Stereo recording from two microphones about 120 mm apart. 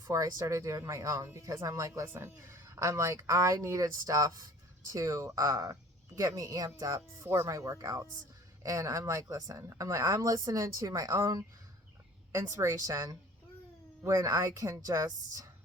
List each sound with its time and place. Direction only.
0.0 s speech: 30° right (ahead or behind)
12.5 s a woman's voice: 25° right (ahead or behind)